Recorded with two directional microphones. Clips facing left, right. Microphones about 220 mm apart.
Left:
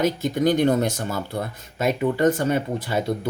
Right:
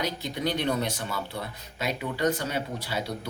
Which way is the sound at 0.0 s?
50° left (ahead or behind).